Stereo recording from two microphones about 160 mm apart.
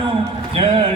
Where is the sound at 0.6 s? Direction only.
30° right (ahead or behind).